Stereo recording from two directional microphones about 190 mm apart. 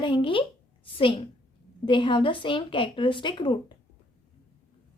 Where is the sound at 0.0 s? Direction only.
25° left (ahead or behind).